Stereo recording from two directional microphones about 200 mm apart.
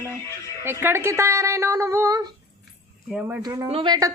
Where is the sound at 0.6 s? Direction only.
10° right (ahead or behind).